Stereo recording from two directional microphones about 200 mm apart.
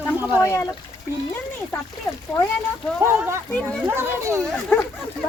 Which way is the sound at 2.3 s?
20° left (ahead or behind).